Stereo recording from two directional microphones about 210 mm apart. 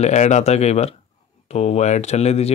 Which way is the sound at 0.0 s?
35° left (ahead or behind).